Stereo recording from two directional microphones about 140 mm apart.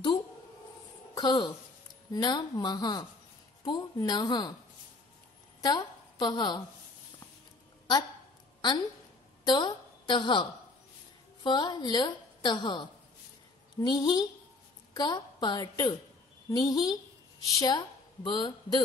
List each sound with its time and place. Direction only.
1.1 s a woman's voice: 30° left (ahead or behind)
5.6 s a woman's voice: 30° left (ahead or behind)
8.5 s a woman's voice: 35° left (ahead or behind)